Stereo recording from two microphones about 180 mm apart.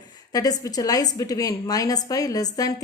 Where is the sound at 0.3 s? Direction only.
20° left (ahead or behind).